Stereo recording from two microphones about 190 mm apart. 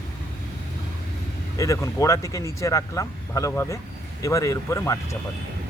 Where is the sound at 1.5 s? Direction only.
15° left (ahead or behind).